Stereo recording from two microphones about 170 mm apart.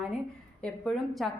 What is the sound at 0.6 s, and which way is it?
Speech, centre (ahead or behind).